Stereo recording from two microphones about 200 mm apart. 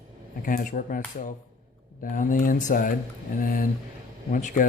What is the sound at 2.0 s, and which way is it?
Speech, 40° left (ahead or behind).